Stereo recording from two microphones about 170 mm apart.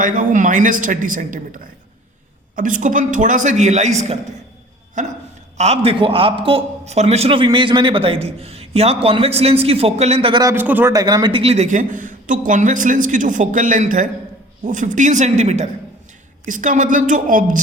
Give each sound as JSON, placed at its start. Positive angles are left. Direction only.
{"t": 0.0, "sound": "a man's voice", "side_deg": -50}
{"t": 10.4, "sound": "a man's voice", "side_deg": -10}
{"t": 10.9, "sound": "a man's voice", "side_deg": -25}